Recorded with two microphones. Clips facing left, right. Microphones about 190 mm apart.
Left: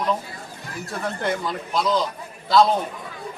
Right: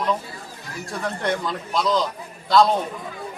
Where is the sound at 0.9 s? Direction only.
Centre (ahead or behind).